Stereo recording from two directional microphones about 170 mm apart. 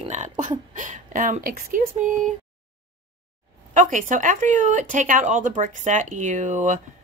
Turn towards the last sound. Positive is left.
turn(degrees=-45)  # may be behind; listen again after turning